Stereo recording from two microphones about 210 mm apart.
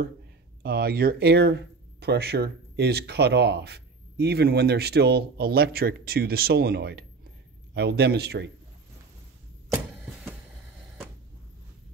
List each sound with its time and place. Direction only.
0.6 s speech: 45° right (ahead or behind)